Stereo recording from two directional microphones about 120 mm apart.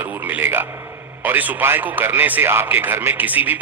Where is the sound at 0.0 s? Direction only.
15° right (ahead or behind).